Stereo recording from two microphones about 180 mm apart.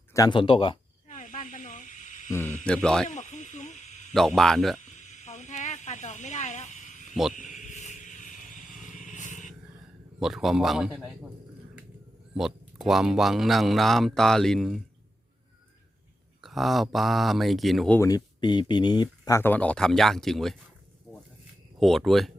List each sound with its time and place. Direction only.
0.1 s speech: 20° left (ahead or behind)
1.0 s snake: 45° left (ahead or behind)
2.6 s speech: 5° left (ahead or behind)
3.1 s snake: 40° left (ahead or behind)
4.1 s speech: centre (ahead or behind)
4.9 s a sound: 40° left (ahead or behind)
7.1 s speech: centre (ahead or behind)
7.3 s vehicle: 45° left (ahead or behind)
10.2 s speech: centre (ahead or behind)
12.3 s speech: 5° right (ahead or behind)
16.4 s speech: centre (ahead or behind)
18.0 s speech: 20° left (ahead or behind); by 20.6 s centre (ahead or behind)
21.8 s speech: centre (ahead or behind)